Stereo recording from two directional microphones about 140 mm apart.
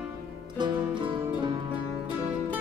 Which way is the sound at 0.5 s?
30° right (ahead or behind).